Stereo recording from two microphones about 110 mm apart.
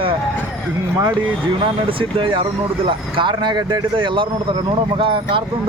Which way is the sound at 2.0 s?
55° right (ahead or behind).